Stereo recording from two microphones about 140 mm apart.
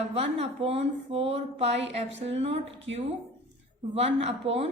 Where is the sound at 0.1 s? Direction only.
45° right (ahead or behind).